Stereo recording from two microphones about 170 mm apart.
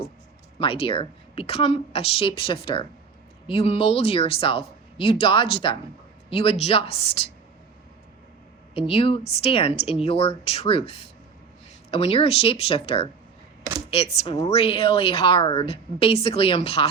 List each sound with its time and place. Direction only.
0.6 s a woman's voice: 30° left (ahead or behind)
8.7 s a woman's voice: 30° left (ahead or behind)